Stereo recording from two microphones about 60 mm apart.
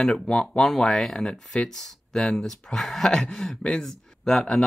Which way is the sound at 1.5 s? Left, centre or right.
Centre.